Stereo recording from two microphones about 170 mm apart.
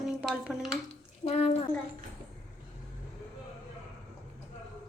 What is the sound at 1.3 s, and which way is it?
Hands, 35° left (ahead or behind).